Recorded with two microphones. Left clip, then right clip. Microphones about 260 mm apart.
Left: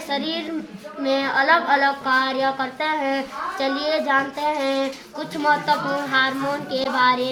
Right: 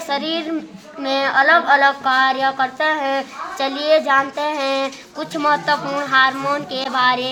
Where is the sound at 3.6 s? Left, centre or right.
Right.